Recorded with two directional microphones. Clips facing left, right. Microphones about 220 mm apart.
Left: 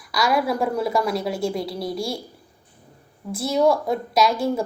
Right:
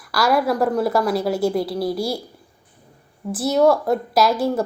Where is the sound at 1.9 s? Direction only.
25° right (ahead or behind).